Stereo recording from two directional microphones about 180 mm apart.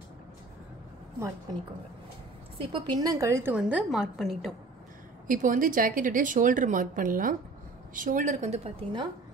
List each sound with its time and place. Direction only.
2.6 s a woman's voice: 25° right (ahead or behind); by 4.6 s centre (ahead or behind)
5.3 s a woman's voice: 45° right (ahead or behind)